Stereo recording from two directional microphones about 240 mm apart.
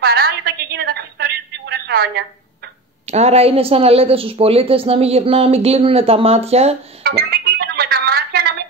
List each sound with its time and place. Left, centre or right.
0.0 s telephone: right
3.1 s a woman's voice: right
7.0 s music: right